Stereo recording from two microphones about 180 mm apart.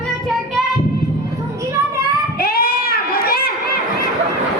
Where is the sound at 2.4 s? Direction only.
55° left (ahead or behind).